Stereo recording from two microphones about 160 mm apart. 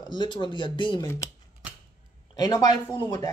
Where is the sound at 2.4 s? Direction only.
25° left (ahead or behind).